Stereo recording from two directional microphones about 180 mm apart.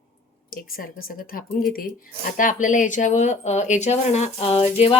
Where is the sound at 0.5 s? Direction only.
55° left (ahead or behind).